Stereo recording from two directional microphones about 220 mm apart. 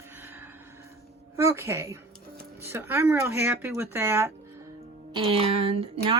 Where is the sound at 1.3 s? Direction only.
10° right (ahead or behind).